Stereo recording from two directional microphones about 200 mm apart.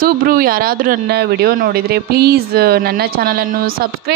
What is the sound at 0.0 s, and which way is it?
A woman's voice, 45° right (ahead or behind).